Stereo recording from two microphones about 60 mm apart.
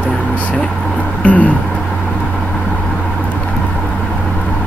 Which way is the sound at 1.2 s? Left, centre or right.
Left.